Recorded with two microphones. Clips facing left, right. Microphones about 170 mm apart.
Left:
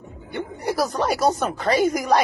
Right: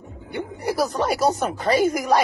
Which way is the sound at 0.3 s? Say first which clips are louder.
Even; 10° right (ahead or behind).